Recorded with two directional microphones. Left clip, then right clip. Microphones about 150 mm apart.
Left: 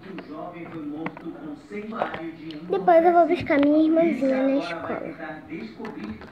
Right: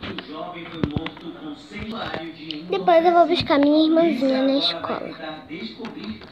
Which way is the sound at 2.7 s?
5° left (ahead or behind).